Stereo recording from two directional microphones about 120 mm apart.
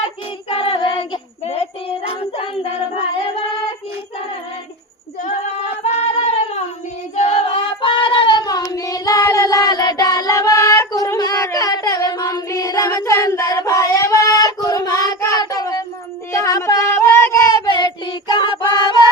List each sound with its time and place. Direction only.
0.4 s child singing: 50° left (ahead or behind)
5.2 s singing: 60° left (ahead or behind); by 15.8 s 30° left (ahead or behind)
16.3 s a sound: 25° left (ahead or behind)
17.7 s child singing: 35° left (ahead or behind)